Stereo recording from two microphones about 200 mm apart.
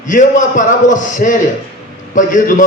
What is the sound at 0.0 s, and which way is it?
A man's voice, 40° left (ahead or behind).